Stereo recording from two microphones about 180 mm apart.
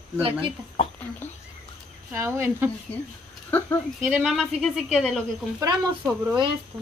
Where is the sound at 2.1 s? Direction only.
15° right (ahead or behind).